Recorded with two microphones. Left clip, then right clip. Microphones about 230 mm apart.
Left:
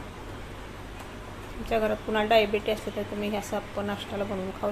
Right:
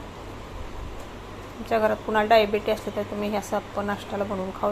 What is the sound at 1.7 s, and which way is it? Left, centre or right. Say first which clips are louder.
A woman's voice: right 4 dB; centre.